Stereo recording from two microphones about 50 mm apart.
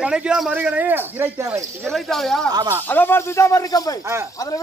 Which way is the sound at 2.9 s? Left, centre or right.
Left.